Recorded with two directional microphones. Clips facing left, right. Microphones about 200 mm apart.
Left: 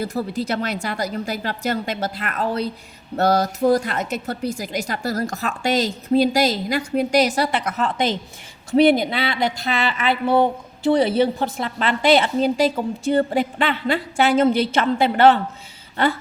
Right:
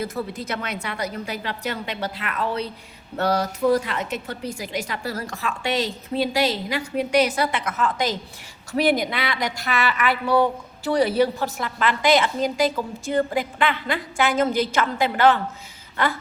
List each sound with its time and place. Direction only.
0.0 s a woman's voice: 35° left (ahead or behind)
6.7 s a woman's voice: 40° left (ahead or behind)